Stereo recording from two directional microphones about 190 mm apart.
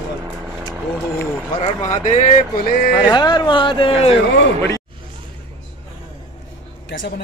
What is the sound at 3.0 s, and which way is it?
Speech, 20° left (ahead or behind).